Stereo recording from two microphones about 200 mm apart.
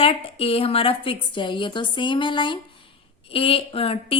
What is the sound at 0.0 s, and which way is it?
A woman's voice, 30° left (ahead or behind).